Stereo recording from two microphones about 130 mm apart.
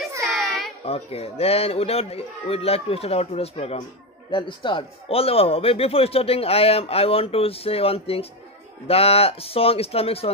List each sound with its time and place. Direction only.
0.2 s a sound: centre (ahead or behind)
0.8 s a man's voice: 50° left (ahead or behind)
4.3 s a man's voice: 40° left (ahead or behind)